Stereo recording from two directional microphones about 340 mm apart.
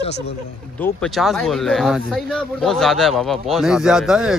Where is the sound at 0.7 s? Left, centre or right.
Centre.